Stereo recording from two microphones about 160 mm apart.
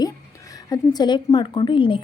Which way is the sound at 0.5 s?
25° left (ahead or behind).